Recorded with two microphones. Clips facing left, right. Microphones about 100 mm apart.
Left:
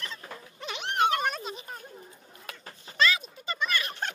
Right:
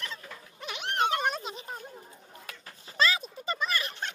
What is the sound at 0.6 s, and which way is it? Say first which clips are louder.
Dog: left 1 dB; 5° right (ahead or behind).